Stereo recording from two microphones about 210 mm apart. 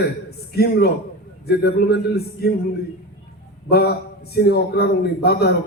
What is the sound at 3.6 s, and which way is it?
A man's voice, 50° left (ahead or behind).